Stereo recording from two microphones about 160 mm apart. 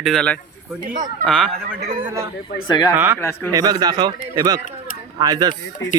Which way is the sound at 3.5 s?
25° right (ahead or behind).